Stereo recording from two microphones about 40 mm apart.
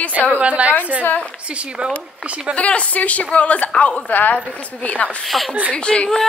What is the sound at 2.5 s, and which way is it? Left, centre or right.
Speech, left.